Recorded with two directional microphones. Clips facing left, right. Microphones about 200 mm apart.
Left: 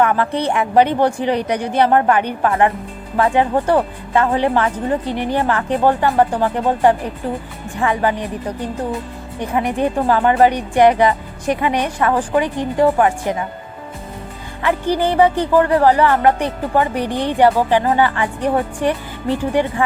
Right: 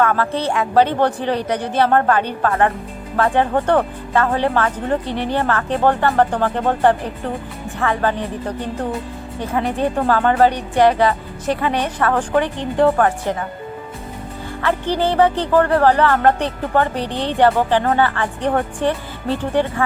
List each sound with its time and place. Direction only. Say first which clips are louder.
0.0 s speech: left 1 dB; 15° left (ahead or behind)
9.4 s speech: left 1 dB; 15° left (ahead or behind)
14.6 s speech: left 2 dB; 15° left (ahead or behind)